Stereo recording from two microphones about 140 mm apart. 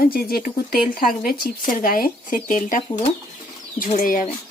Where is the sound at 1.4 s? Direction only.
75° left (ahead or behind).